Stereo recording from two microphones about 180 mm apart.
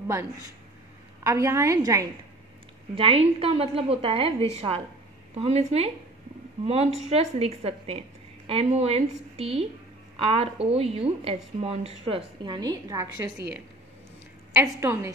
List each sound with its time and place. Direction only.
1.2 s a woman's voice: 15° right (ahead or behind)
3.0 s a woman's voice: 30° right (ahead or behind)
14.5 s a woman's voice: 15° right (ahead or behind)